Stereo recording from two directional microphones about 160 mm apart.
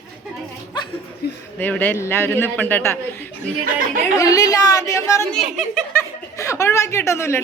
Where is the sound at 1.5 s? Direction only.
10° left (ahead or behind).